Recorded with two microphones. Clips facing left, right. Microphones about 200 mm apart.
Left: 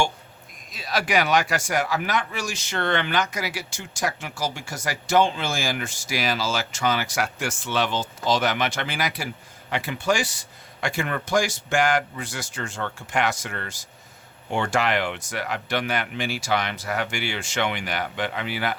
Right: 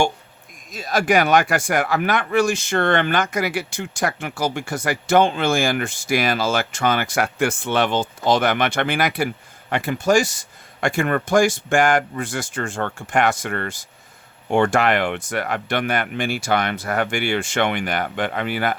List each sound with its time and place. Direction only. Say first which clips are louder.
0.7 s speech: right 6 dB; 45° right (ahead or behind)